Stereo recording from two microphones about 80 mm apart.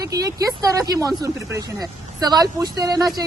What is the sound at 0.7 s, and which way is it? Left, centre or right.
Speech, right.